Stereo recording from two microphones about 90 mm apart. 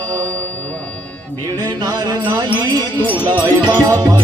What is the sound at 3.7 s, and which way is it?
Music, 40° right (ahead or behind).